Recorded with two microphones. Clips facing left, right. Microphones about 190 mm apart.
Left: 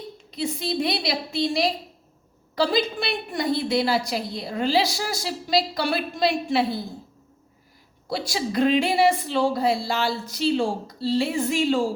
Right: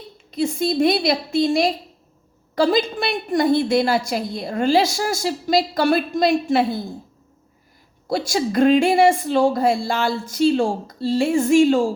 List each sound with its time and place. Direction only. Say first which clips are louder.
0.3 s a woman's voice: right 7 dB; 45° right (ahead or behind)
8.1 s a woman's voice: right 5 dB; 45° right (ahead or behind)